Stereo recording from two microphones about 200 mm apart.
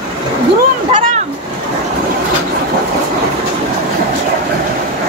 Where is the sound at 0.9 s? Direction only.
35° right (ahead or behind).